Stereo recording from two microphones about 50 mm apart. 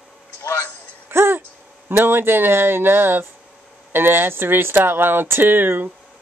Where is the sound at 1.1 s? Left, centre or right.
Right.